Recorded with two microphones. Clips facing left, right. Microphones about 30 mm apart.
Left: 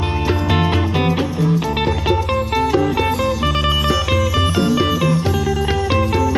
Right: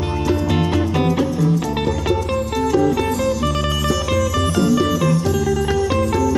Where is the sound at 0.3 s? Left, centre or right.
Left.